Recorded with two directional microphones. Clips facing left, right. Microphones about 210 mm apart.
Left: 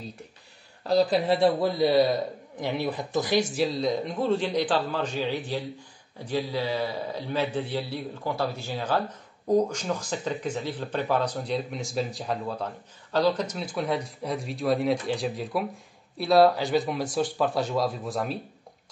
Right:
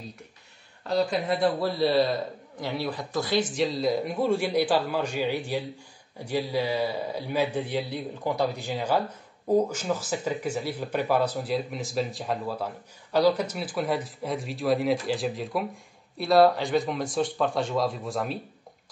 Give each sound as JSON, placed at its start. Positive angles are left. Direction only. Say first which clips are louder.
{"t": 0.8, "sound": "speech", "louder": "left 3 dB", "side_deg": 35}
{"t": 1.8, "sound": "a man's voice", "louder": "left 1 dB", "side_deg": 15}
{"t": 3.5, "sound": "a man's voice", "louder": "even", "side_deg": 0}